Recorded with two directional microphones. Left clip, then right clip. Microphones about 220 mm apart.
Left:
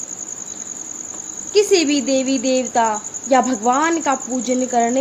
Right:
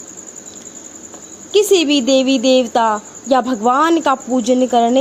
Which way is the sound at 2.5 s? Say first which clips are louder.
Right 2 dB; 30° right (ahead or behind).